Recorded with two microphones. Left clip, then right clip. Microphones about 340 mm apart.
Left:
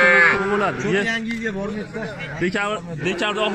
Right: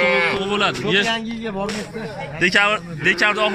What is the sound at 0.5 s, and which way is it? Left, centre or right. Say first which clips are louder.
Speech: right 2 dB; centre.